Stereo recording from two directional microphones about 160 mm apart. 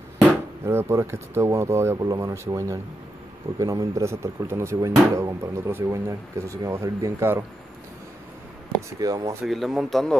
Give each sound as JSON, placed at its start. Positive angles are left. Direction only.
{"t": 0.7, "sound": "speech", "side_deg": -15}
{"t": 9.0, "sound": "speech", "side_deg": -20}
{"t": 9.4, "sound": "speech", "side_deg": 0}